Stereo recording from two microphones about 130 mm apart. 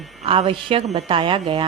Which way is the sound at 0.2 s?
45° right (ahead or behind).